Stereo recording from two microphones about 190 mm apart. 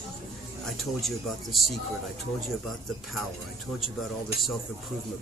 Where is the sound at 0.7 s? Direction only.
Centre (ahead or behind).